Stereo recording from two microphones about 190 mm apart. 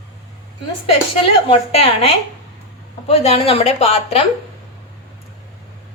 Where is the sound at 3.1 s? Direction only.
30° left (ahead or behind).